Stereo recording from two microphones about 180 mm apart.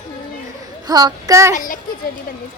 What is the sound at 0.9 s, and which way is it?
Speech, 20° right (ahead or behind).